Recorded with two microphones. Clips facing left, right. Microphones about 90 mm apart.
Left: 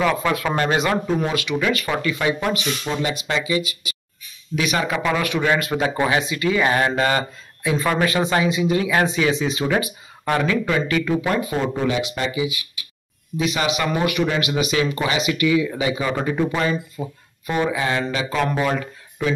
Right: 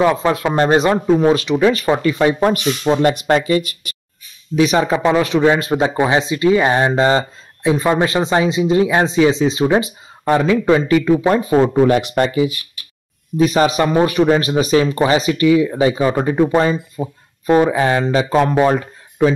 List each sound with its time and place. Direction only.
0.0 s speech: 25° right (ahead or behind); by 3.7 s 50° right (ahead or behind)
4.6 s speech: 30° right (ahead or behind)
11.9 s speech: 50° right (ahead or behind)